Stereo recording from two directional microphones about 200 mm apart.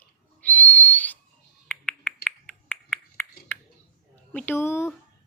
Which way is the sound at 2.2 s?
5° left (ahead or behind).